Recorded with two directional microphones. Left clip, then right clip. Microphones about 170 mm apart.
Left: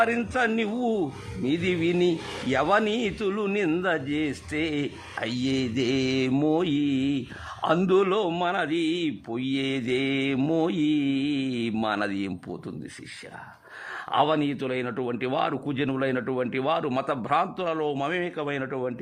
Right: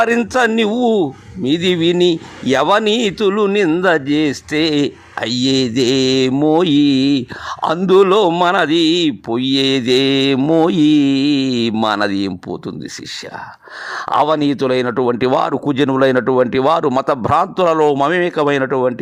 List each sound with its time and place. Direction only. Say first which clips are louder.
0.0 s speech: right 10 dB; 40° right (ahead or behind)
13.9 s speech: right 9 dB; 35° right (ahead or behind)